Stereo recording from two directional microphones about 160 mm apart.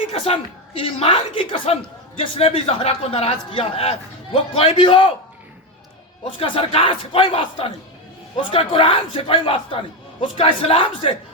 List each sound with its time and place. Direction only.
0.8 s a man's voice: 35° left (ahead or behind)
6.2 s a man's voice: 35° left (ahead or behind)